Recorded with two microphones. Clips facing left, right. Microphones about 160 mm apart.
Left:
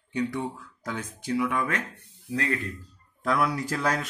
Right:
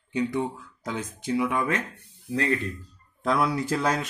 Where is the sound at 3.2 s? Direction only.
25° right (ahead or behind).